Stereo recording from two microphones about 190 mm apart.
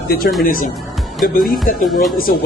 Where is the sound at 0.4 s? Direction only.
45° left (ahead or behind).